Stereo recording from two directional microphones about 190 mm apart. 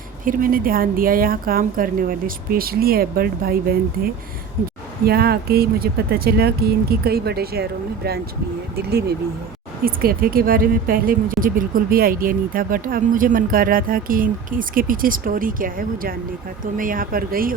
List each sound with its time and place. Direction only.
0.3 s speech: 50° right (ahead or behind)